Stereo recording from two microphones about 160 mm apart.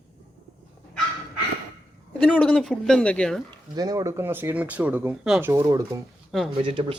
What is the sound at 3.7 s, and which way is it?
Speech, 20° right (ahead or behind).